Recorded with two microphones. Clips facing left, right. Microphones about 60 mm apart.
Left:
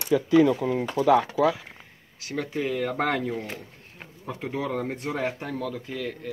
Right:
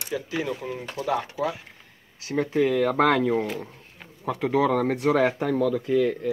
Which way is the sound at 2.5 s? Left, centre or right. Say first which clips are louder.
Right 6 dB; right.